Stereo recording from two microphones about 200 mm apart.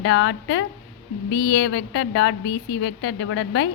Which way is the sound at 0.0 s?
75° left (ahead or behind).